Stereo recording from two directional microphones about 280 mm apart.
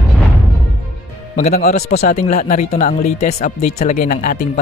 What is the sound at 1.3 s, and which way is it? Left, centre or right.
A man's voice, left.